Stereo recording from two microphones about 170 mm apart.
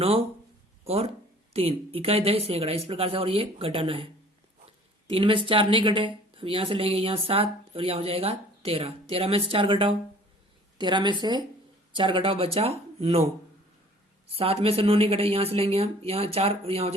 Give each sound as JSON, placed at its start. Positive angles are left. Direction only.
{"t": 0.0, "sound": "a woman's voice", "side_deg": -35}